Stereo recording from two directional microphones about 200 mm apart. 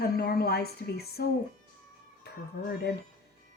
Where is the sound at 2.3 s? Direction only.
55° left (ahead or behind).